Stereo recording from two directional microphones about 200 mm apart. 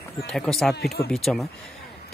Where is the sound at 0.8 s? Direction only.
50° left (ahead or behind).